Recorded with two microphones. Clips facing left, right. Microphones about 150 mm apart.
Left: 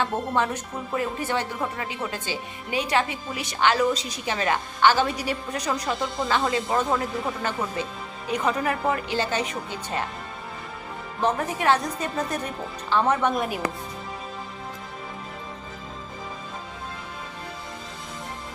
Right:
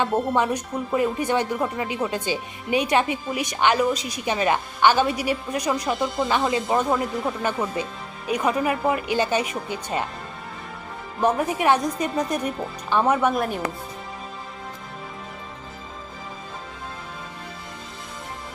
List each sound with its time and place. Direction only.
0.0 s speech: 15° right (ahead or behind)
8.3 s speech: 10° right (ahead or behind)
11.2 s speech: 10° right (ahead or behind)